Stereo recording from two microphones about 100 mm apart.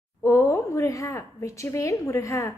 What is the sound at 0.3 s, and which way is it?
A woman's voice, 30° left (ahead or behind).